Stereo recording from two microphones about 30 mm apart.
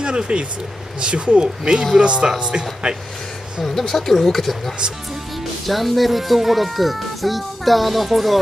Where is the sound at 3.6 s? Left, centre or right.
Centre.